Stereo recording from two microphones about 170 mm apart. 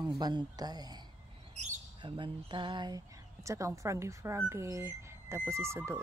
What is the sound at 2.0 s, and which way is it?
Speech, 30° right (ahead or behind).